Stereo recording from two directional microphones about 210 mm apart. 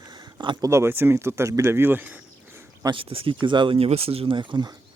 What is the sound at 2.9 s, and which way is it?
Speech, 25° right (ahead or behind).